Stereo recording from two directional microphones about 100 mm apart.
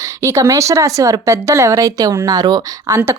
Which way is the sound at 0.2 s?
30° right (ahead or behind).